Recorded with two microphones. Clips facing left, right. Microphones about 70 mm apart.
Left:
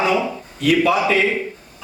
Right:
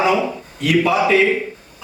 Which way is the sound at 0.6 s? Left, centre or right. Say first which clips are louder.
Even; centre.